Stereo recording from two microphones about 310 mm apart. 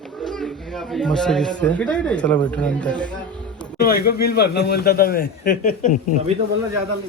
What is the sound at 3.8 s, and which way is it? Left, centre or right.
A man's voice, left.